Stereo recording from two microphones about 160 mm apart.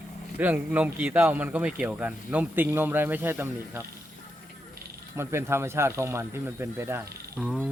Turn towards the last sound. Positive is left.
turn(degrees=0)  # may be behind; listen again after turning